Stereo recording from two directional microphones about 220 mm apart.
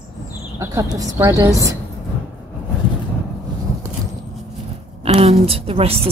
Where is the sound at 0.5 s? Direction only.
15° right (ahead or behind).